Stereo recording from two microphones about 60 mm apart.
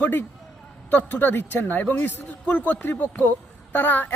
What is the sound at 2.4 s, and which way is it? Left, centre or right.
A woman's voice, centre.